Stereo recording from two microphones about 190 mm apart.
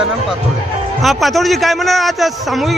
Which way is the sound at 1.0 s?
Centre (ahead or behind).